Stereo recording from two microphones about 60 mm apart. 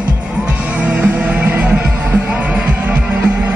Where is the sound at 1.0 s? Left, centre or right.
Right.